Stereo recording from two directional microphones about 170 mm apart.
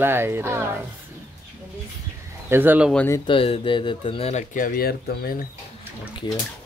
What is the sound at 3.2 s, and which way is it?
Speech, 30° left (ahead or behind).